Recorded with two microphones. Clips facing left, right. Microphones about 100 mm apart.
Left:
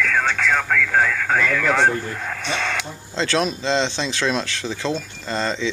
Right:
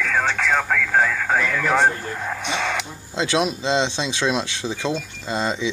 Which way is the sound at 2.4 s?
20° right (ahead or behind).